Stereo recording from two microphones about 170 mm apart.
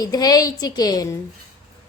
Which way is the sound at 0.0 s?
20° left (ahead or behind).